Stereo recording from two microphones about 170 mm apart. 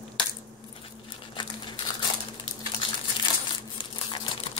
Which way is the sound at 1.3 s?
25° left (ahead or behind).